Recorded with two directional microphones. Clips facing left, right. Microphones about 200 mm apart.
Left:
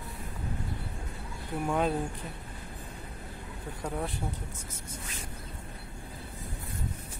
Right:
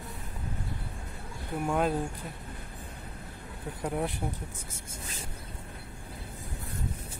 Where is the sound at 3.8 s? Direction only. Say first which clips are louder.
Right 3 dB; 10° right (ahead or behind).